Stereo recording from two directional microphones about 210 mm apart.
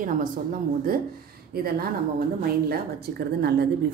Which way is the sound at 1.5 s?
45° right (ahead or behind).